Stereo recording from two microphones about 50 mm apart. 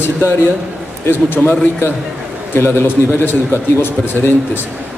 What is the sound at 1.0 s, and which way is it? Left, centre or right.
A man's voice, left.